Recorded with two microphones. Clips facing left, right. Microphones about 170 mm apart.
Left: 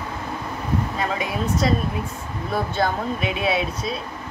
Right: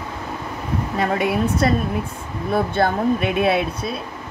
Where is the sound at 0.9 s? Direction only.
60° right (ahead or behind).